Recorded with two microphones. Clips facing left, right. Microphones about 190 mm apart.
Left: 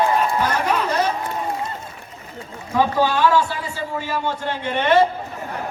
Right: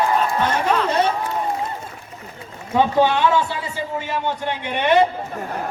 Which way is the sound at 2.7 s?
20° right (ahead or behind).